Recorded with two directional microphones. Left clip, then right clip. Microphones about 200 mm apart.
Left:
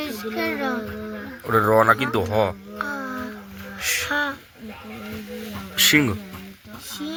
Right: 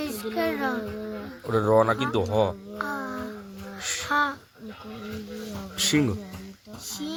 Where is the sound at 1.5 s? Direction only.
Centre (ahead or behind).